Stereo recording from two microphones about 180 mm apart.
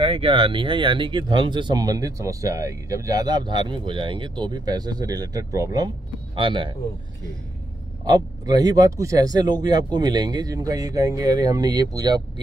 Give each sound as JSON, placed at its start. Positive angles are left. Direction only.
{"t": 0.0, "sound": "speech", "side_deg": -30}
{"t": 8.0, "sound": "speech", "side_deg": -20}